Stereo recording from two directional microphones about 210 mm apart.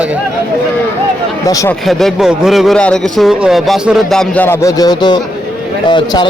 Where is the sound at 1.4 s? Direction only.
15° left (ahead or behind).